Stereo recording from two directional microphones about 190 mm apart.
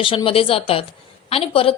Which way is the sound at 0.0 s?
25° left (ahead or behind).